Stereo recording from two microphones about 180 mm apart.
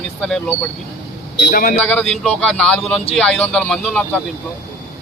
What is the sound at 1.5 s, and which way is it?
Speech, 50° left (ahead or behind).